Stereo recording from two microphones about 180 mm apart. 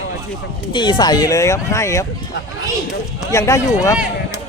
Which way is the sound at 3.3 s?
15° left (ahead or behind).